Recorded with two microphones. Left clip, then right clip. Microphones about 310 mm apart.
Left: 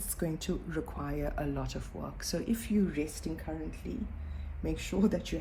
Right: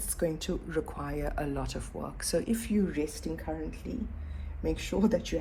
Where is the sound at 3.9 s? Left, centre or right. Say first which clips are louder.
Right 1 dB; right.